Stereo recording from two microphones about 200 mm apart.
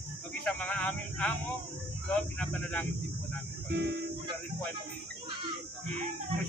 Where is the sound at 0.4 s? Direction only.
5° left (ahead or behind).